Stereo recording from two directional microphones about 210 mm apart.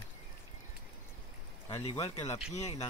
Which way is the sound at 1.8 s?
25° left (ahead or behind).